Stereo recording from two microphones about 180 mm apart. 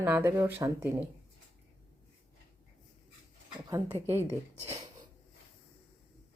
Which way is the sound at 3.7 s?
30° right (ahead or behind).